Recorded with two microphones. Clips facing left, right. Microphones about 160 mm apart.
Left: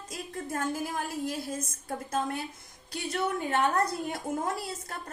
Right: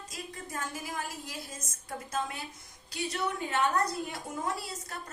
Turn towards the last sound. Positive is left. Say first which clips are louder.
# left 4 dB
turn(degrees=50)  # may be behind; listen again after turning